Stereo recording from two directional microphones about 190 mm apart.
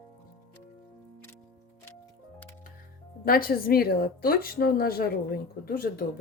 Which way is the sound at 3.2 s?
50° left (ahead or behind).